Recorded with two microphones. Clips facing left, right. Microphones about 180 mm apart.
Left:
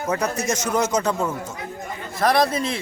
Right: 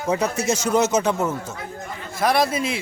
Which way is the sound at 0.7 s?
25° right (ahead or behind).